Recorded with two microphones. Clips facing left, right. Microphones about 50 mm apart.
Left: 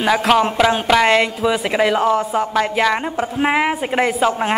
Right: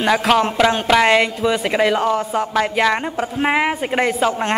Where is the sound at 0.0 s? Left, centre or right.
Centre.